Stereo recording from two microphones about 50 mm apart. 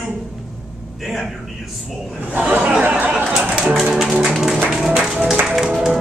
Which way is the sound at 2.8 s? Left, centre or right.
Right.